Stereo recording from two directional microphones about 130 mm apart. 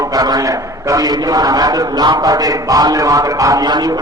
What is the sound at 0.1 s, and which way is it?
A man's voice, 30° right (ahead or behind).